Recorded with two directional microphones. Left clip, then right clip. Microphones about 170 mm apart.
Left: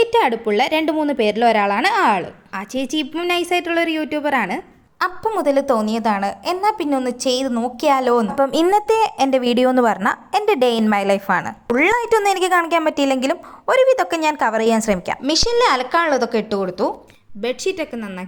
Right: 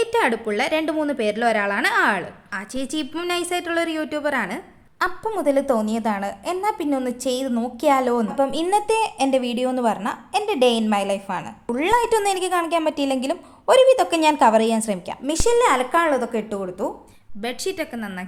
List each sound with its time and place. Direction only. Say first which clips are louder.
0.0 s a woman's voice: left 4 dB; 20° left (ahead or behind)
8.4 s a woman's voice: left 4 dB; 35° left (ahead or behind)
17.4 s speech: left 5 dB; 10° left (ahead or behind)